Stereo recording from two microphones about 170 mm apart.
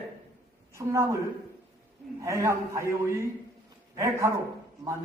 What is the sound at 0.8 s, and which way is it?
Speech, 15° right (ahead or behind).